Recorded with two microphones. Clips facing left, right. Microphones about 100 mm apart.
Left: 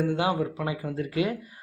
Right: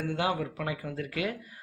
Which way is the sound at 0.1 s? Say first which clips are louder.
Left 4 dB; 20° left (ahead or behind).